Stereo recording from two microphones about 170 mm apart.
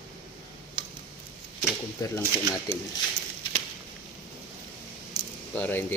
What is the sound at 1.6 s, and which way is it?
Speech, 15° left (ahead or behind).